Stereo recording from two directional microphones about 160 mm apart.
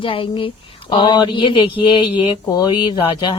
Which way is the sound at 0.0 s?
35° left (ahead or behind).